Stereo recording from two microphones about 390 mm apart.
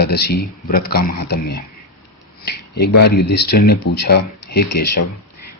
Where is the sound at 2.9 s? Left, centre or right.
Left.